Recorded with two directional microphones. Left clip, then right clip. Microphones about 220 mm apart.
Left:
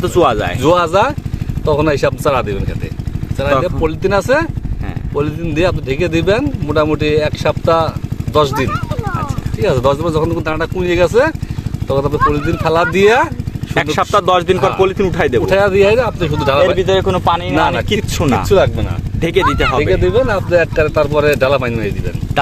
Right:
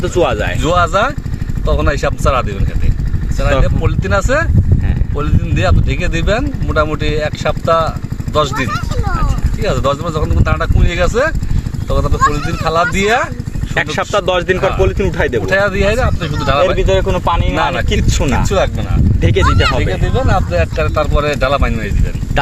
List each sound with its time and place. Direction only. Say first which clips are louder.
0.0 s speech: left 2 dB; 15° left (ahead or behind)
0.6 s speech: left 2 dB; 40° left (ahead or behind)
3.6 s speech: left 4 dB; 40° left (ahead or behind)
13.9 s speech: left 3 dB; 15° left (ahead or behind)
15.4 s speech: left 4 dB; 45° left (ahead or behind)
16.7 s speech: left 1 dB; 20° left (ahead or behind)
18.4 s speech: left 6 dB; 40° left (ahead or behind)
19.2 s speech: left 2 dB; 15° left (ahead or behind)
19.8 s speech: left 5 dB; 45° left (ahead or behind)